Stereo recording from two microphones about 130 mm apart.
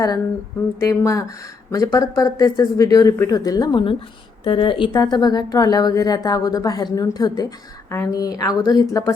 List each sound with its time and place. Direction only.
0.8 s a woman's voice: 25° left (ahead or behind)